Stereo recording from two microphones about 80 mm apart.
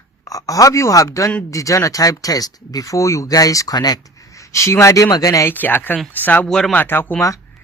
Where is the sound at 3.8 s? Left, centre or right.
Left.